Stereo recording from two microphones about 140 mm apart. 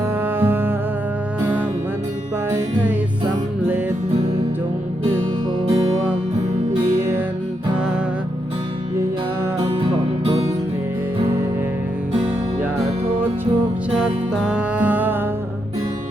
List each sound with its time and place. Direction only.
0.3 s music: 15° right (ahead or behind)
2.5 s music: 20° right (ahead or behind)
9.6 s music: 40° right (ahead or behind)
14.0 s music: 5° right (ahead or behind)